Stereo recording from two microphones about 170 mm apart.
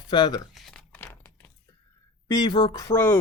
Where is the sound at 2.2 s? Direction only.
20° left (ahead or behind).